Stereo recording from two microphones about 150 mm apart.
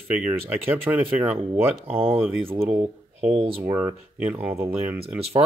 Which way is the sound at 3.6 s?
15° right (ahead or behind).